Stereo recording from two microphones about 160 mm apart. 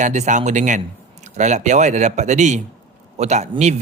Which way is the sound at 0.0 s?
50° right (ahead or behind).